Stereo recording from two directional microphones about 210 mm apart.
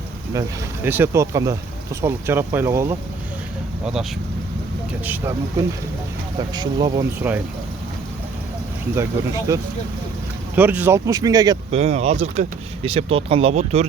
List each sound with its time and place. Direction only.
0.9 s speech: 10° right (ahead or behind)
5.0 s speech: 10° right (ahead or behind)
7.2 s speech: 10° right (ahead or behind)
10.5 s speech: 10° right (ahead or behind)
11.7 s speech: 30° right (ahead or behind)